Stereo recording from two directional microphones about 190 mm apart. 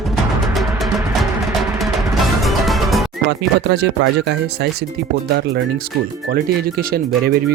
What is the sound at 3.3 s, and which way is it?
Speech, 60° right (ahead or behind).